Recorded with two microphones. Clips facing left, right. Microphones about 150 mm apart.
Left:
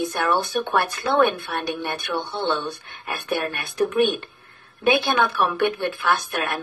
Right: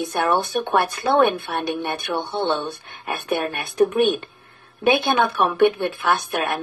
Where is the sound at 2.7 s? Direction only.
Centre (ahead or behind).